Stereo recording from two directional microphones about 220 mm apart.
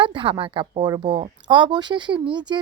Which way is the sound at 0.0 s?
20° right (ahead or behind).